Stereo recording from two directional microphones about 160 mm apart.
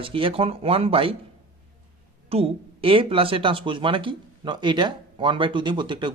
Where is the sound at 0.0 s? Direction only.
35° right (ahead or behind).